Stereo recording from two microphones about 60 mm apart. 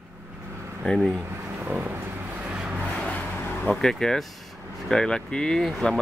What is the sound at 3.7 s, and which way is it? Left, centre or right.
Speech, centre.